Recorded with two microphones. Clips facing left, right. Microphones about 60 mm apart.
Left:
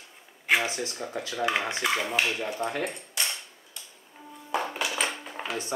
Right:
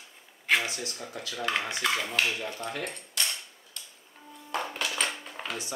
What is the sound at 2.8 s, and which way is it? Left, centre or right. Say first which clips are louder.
Cutlery: left 2 dB; centre.